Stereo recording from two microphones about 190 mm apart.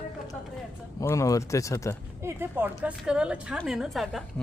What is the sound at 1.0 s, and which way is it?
Speech, 15° left (ahead or behind).